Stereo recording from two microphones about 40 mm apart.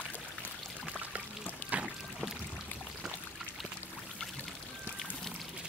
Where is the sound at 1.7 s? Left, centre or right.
Right.